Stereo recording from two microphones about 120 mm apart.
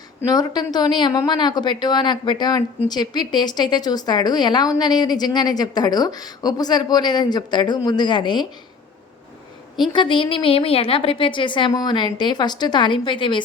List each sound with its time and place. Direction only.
0.3 s speech: 35° left (ahead or behind)
9.9 s a woman's voice: 40° left (ahead or behind)